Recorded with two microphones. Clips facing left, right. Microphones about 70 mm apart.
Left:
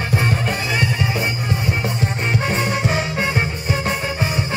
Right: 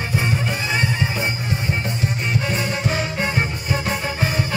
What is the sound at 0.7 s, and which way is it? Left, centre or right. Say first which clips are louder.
Music: even; right.